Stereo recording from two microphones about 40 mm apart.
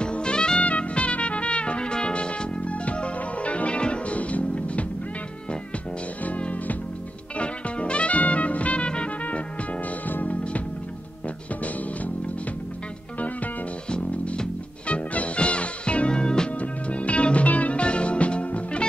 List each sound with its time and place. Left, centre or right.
0.0 s music: left
6.2 s music: left
10.0 s music: left
13.8 s music: left
16.5 s music: left